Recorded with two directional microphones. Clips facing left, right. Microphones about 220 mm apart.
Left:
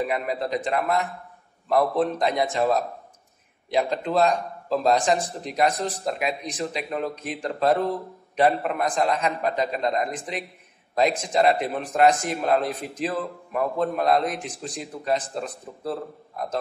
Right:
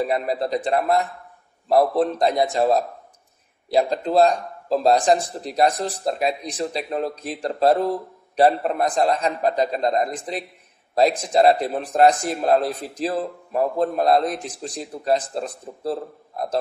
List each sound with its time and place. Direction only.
0.0 s a man's voice: 35° right (ahead or behind)